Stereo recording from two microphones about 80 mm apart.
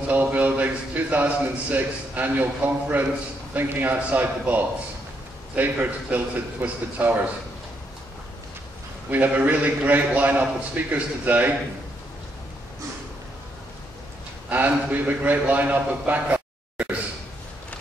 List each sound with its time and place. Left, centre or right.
0.1 s a man's voice: right
9.1 s a man's voice: centre
14.5 s a man's voice: right